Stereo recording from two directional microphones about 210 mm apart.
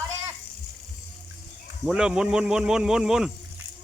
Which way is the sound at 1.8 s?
5° right (ahead or behind).